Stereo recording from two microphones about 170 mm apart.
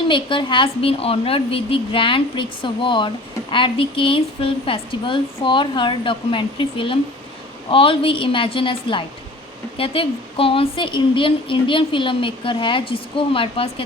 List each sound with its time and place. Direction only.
0.1 s speech: 30° left (ahead or behind)